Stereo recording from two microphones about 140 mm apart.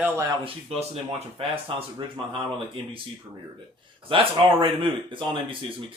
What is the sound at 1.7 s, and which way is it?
Speech, 40° right (ahead or behind).